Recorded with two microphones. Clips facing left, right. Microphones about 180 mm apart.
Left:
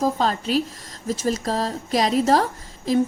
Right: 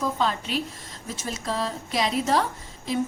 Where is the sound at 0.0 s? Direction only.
40° left (ahead or behind).